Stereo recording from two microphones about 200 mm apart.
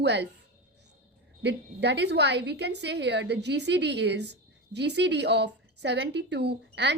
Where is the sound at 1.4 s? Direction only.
60° right (ahead or behind).